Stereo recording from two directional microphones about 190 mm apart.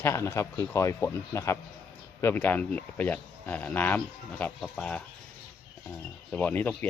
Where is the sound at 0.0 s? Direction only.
15° left (ahead or behind).